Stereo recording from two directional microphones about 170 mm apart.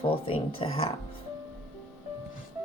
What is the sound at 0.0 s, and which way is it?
Music, 30° left (ahead or behind).